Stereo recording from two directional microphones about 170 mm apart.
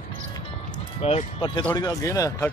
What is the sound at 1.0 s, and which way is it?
Speech, 35° left (ahead or behind).